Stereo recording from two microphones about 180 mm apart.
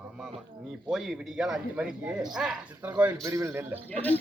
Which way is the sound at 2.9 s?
15° right (ahead or behind).